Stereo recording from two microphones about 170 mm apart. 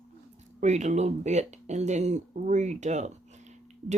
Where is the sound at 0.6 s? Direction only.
45° right (ahead or behind).